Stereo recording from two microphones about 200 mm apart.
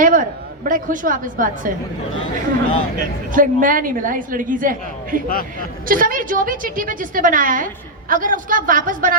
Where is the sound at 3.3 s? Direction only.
40° right (ahead or behind).